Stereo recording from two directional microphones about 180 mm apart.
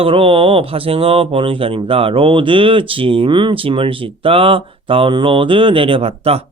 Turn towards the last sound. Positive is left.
turn(degrees=-35)  # may be behind; listen again after turning